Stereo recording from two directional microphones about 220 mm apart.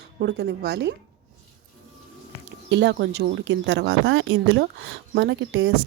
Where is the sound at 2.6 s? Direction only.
55° right (ahead or behind); by 4.6 s 70° right (ahead or behind).